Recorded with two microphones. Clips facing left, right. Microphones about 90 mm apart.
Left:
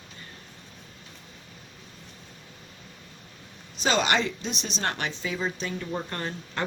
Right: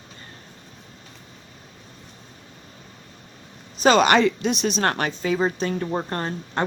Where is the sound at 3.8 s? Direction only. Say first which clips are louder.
Right 8 dB; 55° right (ahead or behind).